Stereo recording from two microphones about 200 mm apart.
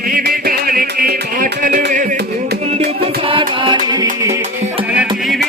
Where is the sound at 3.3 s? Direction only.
25° right (ahead or behind).